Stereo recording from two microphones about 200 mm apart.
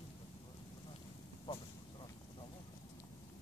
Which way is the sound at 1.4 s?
25° left (ahead or behind).